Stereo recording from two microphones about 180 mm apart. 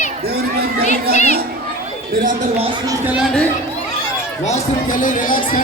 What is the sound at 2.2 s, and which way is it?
Speech, 45° right (ahead or behind).